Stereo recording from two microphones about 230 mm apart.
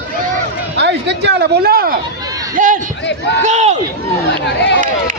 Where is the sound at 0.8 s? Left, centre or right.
Right.